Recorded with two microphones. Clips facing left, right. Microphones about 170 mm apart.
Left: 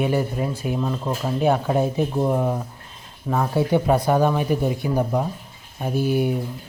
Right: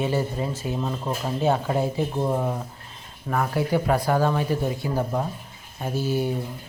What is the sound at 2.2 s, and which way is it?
Speech, 5° left (ahead or behind).